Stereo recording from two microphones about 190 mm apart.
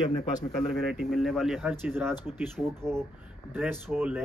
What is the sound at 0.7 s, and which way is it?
Speech, centre (ahead or behind).